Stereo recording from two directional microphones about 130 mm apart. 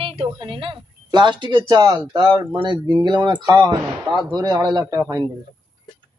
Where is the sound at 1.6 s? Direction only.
25° right (ahead or behind).